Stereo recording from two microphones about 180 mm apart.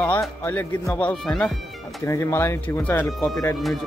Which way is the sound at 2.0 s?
15° left (ahead or behind).